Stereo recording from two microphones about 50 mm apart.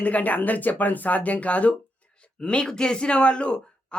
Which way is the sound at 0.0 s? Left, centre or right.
Left.